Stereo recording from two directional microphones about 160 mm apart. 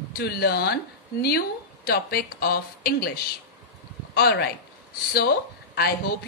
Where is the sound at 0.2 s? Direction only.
80° left.